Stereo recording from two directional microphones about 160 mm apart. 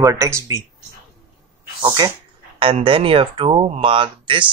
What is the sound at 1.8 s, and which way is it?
Speech, 25° right (ahead or behind).